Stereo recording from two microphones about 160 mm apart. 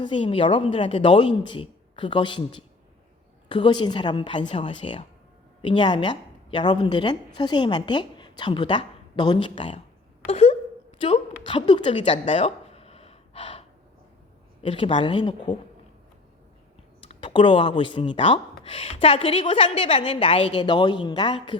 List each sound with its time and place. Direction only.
0.0 s a woman's voice: 30° left (ahead or behind)
10.2 s wail: 40° left (ahead or behind)
11.4 s a woman's voice: 30° left (ahead or behind)
12.3 s gasp: 35° left (ahead or behind)
14.6 s a woman's voice: 35° left (ahead or behind)
17.1 s a woman's voice: 30° left (ahead or behind)